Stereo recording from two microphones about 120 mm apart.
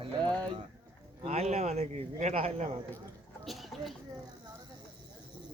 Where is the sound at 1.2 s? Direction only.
65° right (ahead or behind).